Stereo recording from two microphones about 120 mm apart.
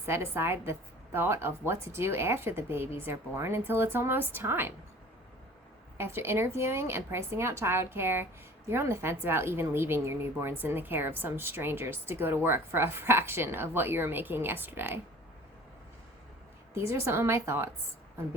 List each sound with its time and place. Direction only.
0.0 s a woman's voice: 20° right (ahead or behind)
6.0 s a woman's voice: 20° right (ahead or behind)
16.7 s a woman's voice: 20° right (ahead or behind)